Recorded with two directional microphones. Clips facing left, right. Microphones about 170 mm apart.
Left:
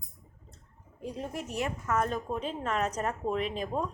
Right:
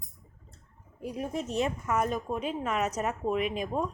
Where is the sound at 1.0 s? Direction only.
10° right (ahead or behind).